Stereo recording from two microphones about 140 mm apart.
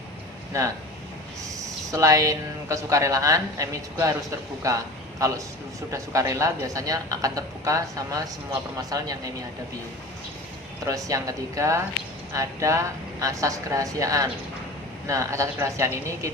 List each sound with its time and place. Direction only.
1.6 s speech: 25° right (ahead or behind)
10.8 s speech: 25° right (ahead or behind)